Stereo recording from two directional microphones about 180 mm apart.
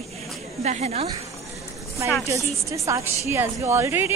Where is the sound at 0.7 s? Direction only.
35° right (ahead or behind).